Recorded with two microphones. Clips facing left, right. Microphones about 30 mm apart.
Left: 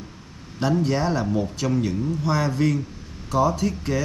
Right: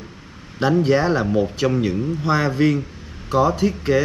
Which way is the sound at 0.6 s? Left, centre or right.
Right.